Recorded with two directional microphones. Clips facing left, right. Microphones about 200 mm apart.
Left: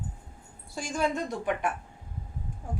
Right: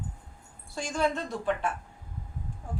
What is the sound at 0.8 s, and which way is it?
Speech, 10° left (ahead or behind).